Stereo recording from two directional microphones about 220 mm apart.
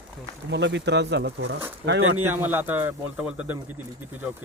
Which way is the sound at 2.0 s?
70° right (ahead or behind).